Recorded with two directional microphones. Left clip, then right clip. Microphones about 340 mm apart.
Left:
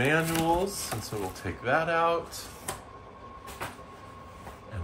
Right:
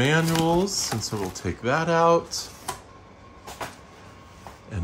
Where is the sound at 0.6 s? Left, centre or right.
Right.